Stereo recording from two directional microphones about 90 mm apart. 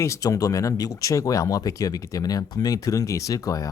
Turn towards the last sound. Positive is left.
turn(degrees=40)  # may be behind; listen again after turning